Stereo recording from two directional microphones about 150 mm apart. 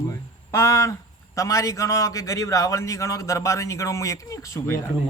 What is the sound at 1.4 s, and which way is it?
A man's voice, 20° left (ahead or behind).